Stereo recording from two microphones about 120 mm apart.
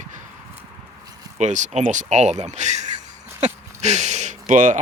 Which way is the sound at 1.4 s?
85° right.